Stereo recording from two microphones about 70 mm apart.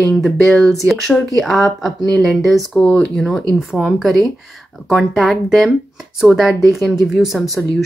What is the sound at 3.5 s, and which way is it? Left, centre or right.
A woman's voice, centre.